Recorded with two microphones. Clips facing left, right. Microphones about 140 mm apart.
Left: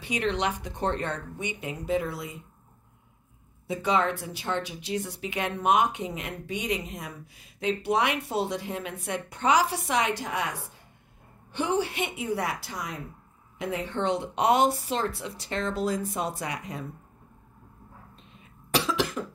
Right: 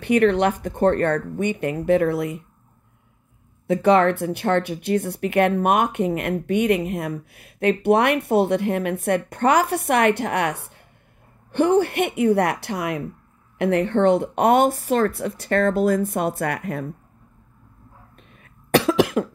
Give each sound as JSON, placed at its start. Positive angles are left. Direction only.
{"t": 0.0, "sound": "speech", "side_deg": -55}
{"t": 3.6, "sound": "speech", "side_deg": -60}
{"t": 11.5, "sound": "speech", "side_deg": -55}
{"t": 18.3, "sound": "cough", "side_deg": -55}